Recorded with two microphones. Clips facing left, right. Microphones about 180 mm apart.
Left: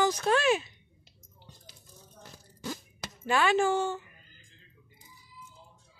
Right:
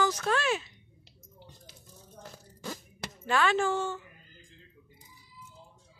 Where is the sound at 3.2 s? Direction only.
10° left (ahead or behind).